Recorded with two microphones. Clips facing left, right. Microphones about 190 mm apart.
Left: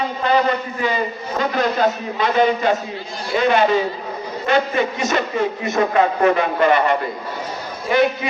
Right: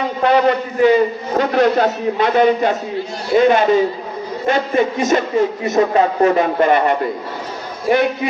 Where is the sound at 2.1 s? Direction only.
55° right (ahead or behind).